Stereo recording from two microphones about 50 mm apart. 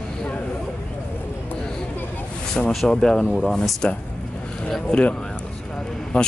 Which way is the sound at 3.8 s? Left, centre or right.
Left.